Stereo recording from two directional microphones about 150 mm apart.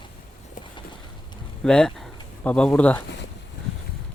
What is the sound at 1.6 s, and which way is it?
Speech, 5° left (ahead or behind).